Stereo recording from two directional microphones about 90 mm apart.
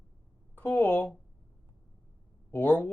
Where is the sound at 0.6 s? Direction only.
20° left (ahead or behind).